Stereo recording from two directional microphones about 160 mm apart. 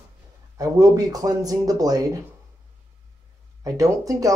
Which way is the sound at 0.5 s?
20° right (ahead or behind).